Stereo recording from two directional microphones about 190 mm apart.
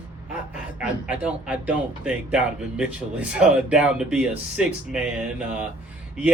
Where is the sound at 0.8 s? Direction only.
5° right (ahead or behind).